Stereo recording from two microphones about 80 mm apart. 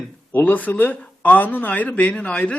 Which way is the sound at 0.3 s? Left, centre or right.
Left.